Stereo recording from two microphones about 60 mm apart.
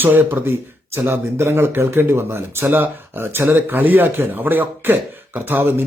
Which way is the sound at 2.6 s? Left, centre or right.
Right.